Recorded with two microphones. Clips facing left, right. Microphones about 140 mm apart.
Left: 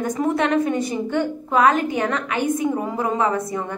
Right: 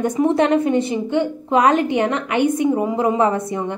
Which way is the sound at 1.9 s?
25° right (ahead or behind).